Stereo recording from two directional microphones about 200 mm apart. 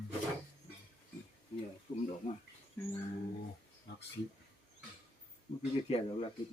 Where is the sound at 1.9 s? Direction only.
30° left (ahead or behind).